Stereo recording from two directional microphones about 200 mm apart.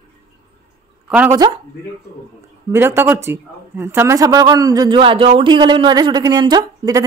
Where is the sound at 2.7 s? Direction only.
10° right (ahead or behind).